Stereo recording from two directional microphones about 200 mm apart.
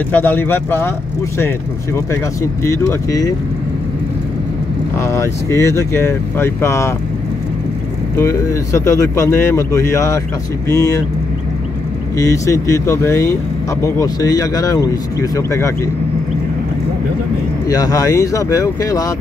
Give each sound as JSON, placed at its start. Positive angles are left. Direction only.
{"t": 0.1, "sound": "speech", "side_deg": 10}
{"t": 2.6, "sound": "speech", "side_deg": 15}
{"t": 4.9, "sound": "speech", "side_deg": 15}
{"t": 8.2, "sound": "speech", "side_deg": 15}
{"t": 12.2, "sound": "speech", "side_deg": 15}
{"t": 17.6, "sound": "speech", "side_deg": 15}